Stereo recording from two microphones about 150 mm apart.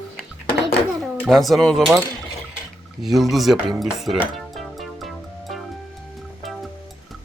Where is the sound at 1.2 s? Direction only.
Centre (ahead or behind).